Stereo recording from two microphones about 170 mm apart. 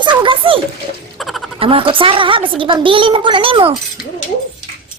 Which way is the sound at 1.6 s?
30° right (ahead or behind).